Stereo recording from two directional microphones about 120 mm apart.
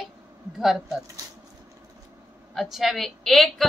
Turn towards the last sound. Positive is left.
turn(degrees=0)  # may be behind; listen again after turning